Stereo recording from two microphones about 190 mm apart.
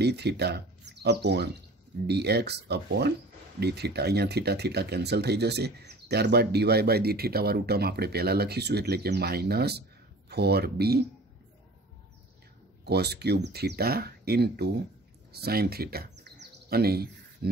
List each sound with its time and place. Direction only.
0.0 s speech: 60° right (ahead or behind)
12.8 s speech: 60° right (ahead or behind)
15.3 s bird: 55° right (ahead or behind)